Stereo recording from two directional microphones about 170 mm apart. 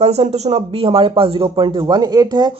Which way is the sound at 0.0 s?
40° right (ahead or behind).